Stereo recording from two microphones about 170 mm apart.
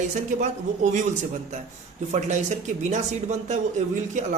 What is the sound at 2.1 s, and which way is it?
Speech, 45° right (ahead or behind).